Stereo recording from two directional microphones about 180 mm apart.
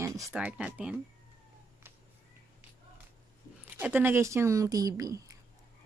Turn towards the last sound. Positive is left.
turn(degrees=-20)  # may be behind; listen again after turning